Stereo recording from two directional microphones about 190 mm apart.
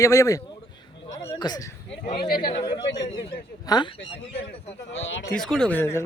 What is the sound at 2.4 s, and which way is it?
Speech, 25° left (ahead or behind).